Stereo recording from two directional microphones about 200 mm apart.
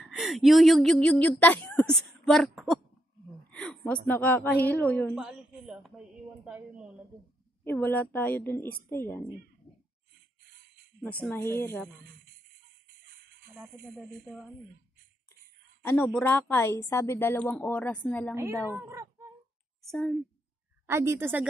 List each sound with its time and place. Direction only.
0.0 s a woman's voice: centre (ahead or behind)
5.1 s speech: 5° right (ahead or behind)
7.6 s a woman's voice: 10° left (ahead or behind)
11.1 s a woman's voice: 10° left (ahead or behind)
12.8 s music: 55° right (ahead or behind)
13.5 s speech: 5° right (ahead or behind)
15.8 s a woman's voice: 10° left (ahead or behind)
18.7 s speech: 15° right (ahead or behind)
19.9 s speech: centre (ahead or behind)
20.8 s a woman's voice: 15° right (ahead or behind)